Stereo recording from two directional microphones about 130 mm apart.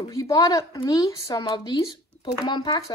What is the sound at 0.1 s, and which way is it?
A woman's voice, 30° left (ahead or behind).